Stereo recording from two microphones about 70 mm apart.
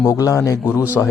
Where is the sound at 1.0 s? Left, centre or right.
Left.